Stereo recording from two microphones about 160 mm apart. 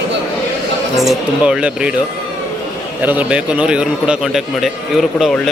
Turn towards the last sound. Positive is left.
turn(degrees=0)  # may be behind; listen again after turning